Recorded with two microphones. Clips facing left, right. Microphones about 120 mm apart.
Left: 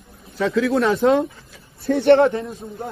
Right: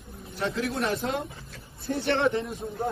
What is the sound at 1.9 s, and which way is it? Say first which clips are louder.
Speech: left 13 dB; 60° left (ahead or behind).